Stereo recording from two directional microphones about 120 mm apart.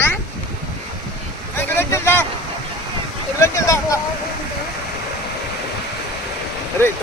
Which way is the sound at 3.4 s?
25° left (ahead or behind).